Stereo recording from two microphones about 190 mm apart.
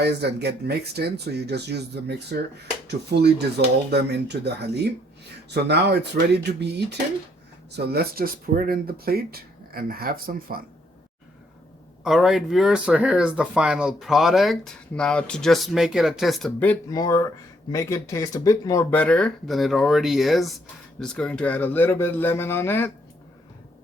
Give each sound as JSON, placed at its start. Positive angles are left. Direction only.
{"t": 0.0, "sound": "speech", "side_deg": -60}
{"t": 12.0, "sound": "speech", "side_deg": 0}
{"t": 16.9, "sound": "a man's voice", "side_deg": 20}